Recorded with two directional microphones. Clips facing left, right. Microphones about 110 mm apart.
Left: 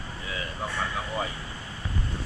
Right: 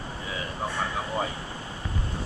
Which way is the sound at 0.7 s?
20° right (ahead or behind).